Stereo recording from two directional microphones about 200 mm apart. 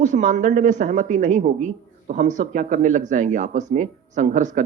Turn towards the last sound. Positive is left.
turn(degrees=-40)  # may be behind; listen again after turning